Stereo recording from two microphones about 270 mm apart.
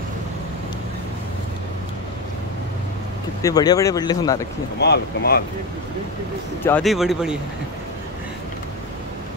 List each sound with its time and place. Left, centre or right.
3.4 s speech: centre
4.7 s speech: left
6.6 s speech: centre